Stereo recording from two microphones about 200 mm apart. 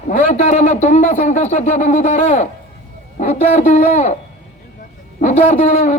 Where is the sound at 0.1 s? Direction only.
35° left (ahead or behind).